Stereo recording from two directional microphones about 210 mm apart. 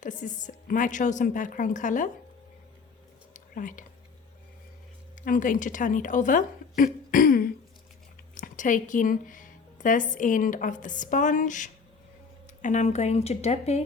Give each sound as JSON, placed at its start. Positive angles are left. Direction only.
{"t": 0.0, "sound": "a woman's voice", "side_deg": 35}
{"t": 3.3, "sound": "a sound", "side_deg": 40}
{"t": 5.2, "sound": "a woman's voice", "side_deg": 40}